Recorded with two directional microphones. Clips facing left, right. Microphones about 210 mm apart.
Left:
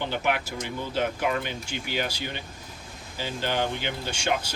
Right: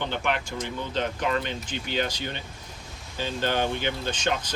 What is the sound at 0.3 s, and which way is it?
Speech, 10° left (ahead or behind).